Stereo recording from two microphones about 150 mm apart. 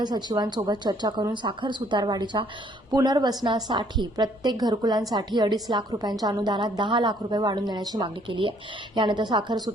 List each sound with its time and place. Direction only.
0.0 s a woman's voice: 30° right (ahead or behind)